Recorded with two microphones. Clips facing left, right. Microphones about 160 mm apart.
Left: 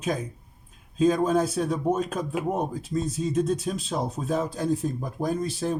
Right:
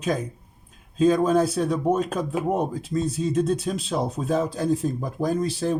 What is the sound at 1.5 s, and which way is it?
Speech, 80° right.